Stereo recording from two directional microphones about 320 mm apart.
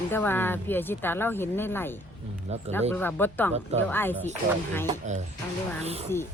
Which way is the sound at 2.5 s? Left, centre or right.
Centre.